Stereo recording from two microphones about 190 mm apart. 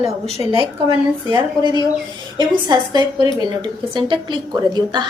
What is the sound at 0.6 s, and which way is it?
A woman's voice, 25° right (ahead or behind).